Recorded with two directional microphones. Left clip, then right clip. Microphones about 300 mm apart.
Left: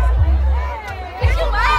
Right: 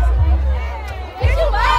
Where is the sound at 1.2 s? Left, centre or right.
Right.